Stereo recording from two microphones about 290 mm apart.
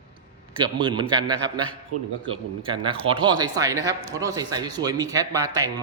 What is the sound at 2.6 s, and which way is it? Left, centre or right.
A man's voice, centre.